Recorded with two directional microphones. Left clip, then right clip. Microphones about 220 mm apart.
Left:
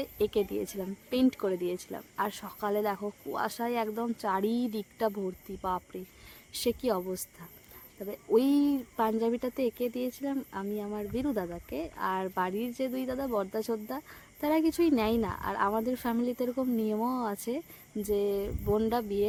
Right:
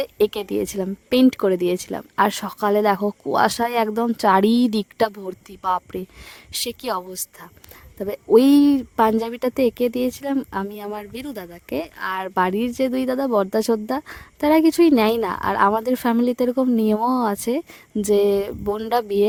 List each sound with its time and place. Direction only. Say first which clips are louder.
0.0 s speech: right 9 dB; 45° right (ahead or behind)
11.3 s speech: even; 10° left (ahead or behind)
11.7 s speech: right 8 dB; 50° right (ahead or behind)